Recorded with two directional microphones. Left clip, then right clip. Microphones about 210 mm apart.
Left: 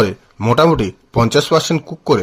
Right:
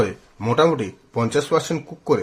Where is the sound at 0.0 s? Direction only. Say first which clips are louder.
Left 6 dB; 40° left (ahead or behind).